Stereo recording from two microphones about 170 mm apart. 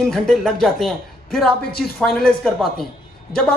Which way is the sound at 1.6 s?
65° left (ahead or behind).